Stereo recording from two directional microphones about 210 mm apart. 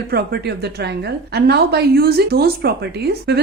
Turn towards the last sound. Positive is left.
turn(degrees=-50)  # may be behind; listen again after turning